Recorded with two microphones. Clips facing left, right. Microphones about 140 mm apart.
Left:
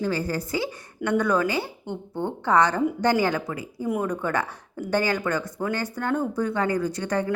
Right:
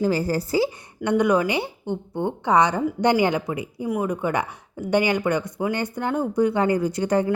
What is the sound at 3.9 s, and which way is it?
Speech, 5° right (ahead or behind).